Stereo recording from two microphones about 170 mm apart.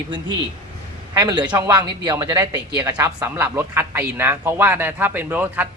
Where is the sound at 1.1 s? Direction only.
25° right (ahead or behind).